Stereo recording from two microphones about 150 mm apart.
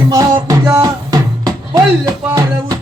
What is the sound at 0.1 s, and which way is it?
Music, 25° right (ahead or behind).